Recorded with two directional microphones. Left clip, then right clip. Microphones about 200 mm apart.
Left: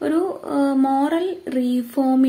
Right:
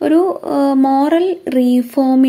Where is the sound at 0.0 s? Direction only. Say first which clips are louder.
Right 8 dB; 40° right (ahead or behind).